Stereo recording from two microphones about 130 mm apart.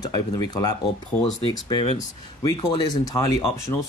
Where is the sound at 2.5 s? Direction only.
35° left (ahead or behind).